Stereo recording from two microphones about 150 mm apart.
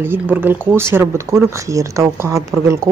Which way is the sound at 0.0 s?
15° right (ahead or behind).